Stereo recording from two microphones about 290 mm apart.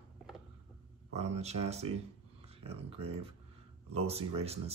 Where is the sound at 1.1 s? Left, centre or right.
Right.